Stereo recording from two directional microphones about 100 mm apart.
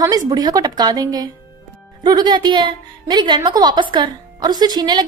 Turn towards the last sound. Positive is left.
turn(degrees=-45)  # may be behind; listen again after turning